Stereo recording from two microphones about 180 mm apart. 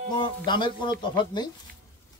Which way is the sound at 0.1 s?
25° left (ahead or behind).